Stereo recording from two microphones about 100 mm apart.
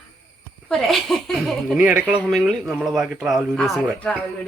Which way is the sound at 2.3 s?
Centre (ahead or behind).